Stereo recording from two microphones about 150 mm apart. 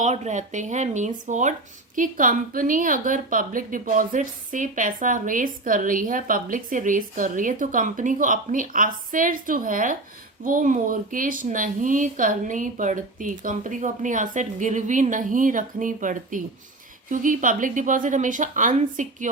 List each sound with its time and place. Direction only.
0.0 s a woman's voice: 50° right (ahead or behind)